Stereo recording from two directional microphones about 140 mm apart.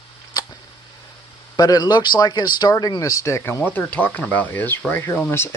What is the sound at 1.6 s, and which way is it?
Speech, 30° left (ahead or behind).